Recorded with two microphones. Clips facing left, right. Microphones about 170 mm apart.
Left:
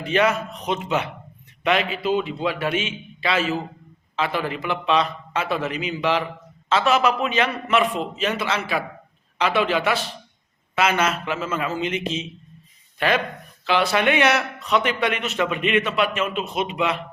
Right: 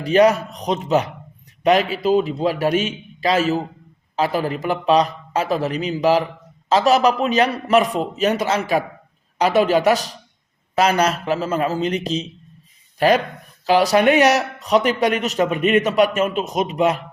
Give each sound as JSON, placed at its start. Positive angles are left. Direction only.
{"t": 0.0, "sound": "a man's voice", "side_deg": -40}